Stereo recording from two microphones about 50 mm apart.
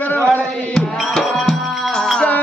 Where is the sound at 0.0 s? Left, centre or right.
Left.